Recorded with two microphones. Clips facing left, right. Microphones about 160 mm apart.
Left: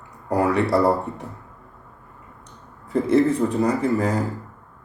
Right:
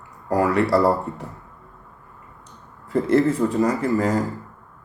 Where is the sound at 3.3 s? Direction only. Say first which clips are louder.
Even; 20° left (ahead or behind).